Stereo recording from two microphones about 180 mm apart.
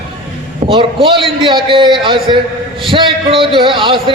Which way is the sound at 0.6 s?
30° right (ahead or behind).